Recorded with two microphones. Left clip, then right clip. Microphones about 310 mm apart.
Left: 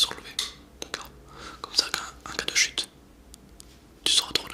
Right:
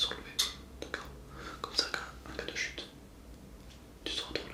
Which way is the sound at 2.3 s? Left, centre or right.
Left.